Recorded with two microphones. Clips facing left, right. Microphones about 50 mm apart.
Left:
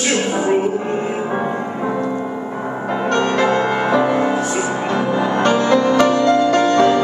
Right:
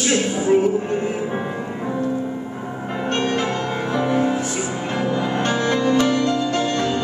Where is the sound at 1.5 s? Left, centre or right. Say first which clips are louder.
Left 4 dB; left.